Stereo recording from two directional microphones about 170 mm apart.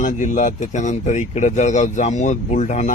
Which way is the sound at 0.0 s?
50° left (ahead or behind).